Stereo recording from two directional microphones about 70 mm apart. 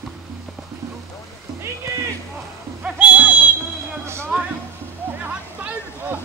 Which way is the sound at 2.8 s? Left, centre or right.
Centre.